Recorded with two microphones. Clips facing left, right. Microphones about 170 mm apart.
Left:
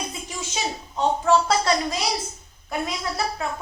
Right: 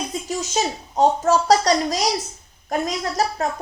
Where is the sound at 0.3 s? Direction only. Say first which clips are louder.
Right 8 dB; 40° right (ahead or behind).